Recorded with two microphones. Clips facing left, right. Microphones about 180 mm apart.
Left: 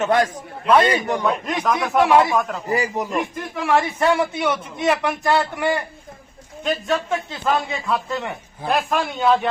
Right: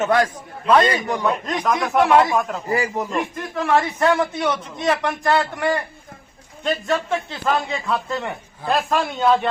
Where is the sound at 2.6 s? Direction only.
15° left (ahead or behind).